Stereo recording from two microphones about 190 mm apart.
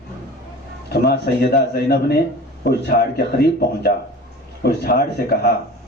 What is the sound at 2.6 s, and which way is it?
Speech, 55° left (ahead or behind).